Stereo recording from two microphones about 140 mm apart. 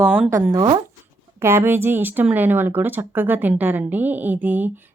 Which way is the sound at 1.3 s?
15° right (ahead or behind).